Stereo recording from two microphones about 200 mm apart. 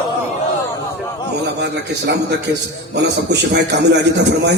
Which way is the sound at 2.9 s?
60° right (ahead or behind).